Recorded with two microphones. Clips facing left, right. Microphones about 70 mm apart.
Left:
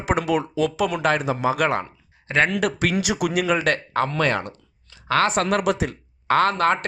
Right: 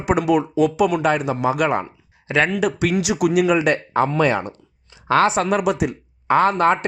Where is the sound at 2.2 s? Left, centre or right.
Left.